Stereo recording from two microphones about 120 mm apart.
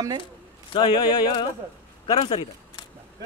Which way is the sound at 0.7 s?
40° left (ahead or behind).